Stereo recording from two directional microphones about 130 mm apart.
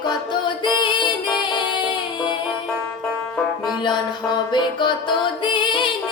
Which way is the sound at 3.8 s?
35° left (ahead or behind).